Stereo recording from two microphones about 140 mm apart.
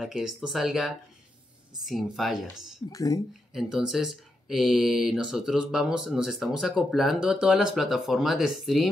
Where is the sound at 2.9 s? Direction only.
25° left (ahead or behind).